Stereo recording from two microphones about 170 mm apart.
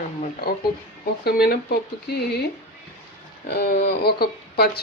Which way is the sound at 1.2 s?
65° left (ahead or behind).